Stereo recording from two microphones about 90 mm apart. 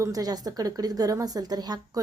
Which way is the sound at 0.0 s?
40° right (ahead or behind).